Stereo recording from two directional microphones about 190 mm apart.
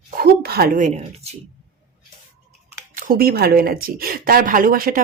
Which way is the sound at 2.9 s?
50° right (ahead or behind).